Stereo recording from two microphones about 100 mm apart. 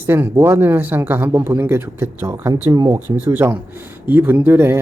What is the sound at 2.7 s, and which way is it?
Speech, 40° right (ahead or behind).